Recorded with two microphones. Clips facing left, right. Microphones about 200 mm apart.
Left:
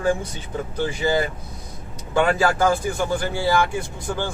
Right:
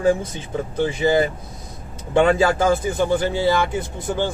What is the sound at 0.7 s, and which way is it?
Speech, 25° right (ahead or behind).